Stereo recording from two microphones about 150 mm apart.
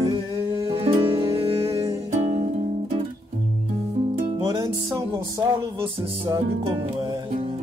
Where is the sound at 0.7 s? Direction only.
40° right (ahead or behind).